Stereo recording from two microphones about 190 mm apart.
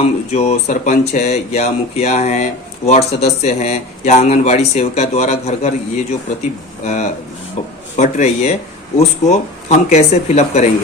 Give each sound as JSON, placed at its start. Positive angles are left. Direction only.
{"t": 0.0, "sound": "speech", "side_deg": 35}
{"t": 6.8, "sound": "speech", "side_deg": 35}